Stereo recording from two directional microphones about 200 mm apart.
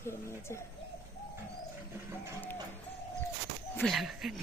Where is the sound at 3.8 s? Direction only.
Centre (ahead or behind).